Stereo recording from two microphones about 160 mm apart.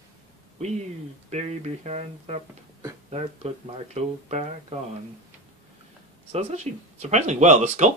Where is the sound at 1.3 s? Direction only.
45° right (ahead or behind).